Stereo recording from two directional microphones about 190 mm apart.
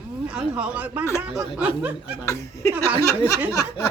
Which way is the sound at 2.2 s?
15° left (ahead or behind).